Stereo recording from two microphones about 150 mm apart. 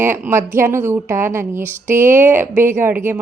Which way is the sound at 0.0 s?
15° right (ahead or behind).